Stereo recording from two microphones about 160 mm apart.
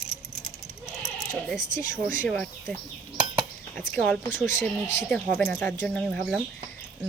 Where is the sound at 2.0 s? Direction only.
55° right (ahead or behind).